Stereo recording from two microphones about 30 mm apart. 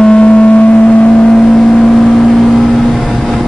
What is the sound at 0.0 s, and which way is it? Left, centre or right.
Vehicle, left.